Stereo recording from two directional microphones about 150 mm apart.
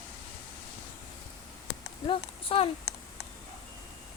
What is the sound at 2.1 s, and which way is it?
Speech, 40° left (ahead or behind).